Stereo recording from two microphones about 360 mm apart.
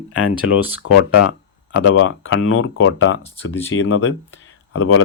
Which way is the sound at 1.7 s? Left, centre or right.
Left.